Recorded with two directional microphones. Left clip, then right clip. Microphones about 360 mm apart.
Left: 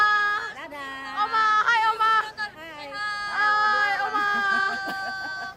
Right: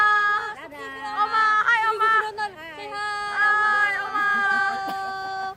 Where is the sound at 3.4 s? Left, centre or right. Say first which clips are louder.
Right 2 dB; centre.